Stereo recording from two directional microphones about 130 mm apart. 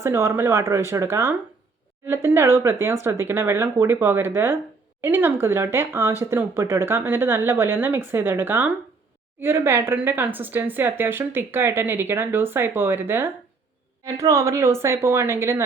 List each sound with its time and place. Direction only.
0.0 s speech: 20° right (ahead or behind)